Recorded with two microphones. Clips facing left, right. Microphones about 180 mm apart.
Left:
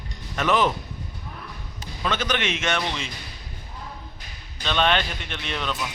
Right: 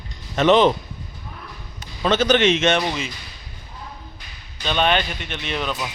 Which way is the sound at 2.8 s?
5° right (ahead or behind).